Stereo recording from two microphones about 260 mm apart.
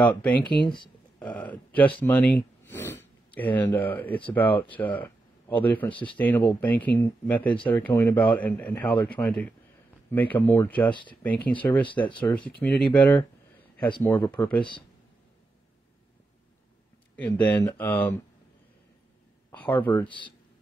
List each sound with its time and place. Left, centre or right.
0.1 s speech: centre
10.9 s speech: centre
11.2 s speech: centre
17.1 s speech: centre
19.5 s speech: centre
20.1 s speech: centre